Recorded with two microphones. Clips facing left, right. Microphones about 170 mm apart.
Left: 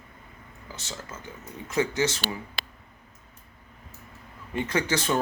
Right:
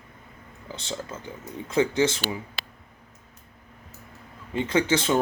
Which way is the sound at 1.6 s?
15° right (ahead or behind).